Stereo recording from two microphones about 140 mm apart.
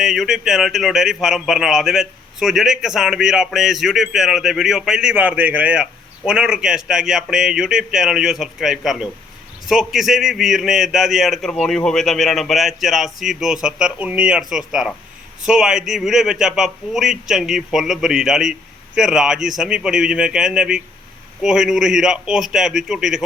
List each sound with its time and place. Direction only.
0.0 s speech: centre (ahead or behind)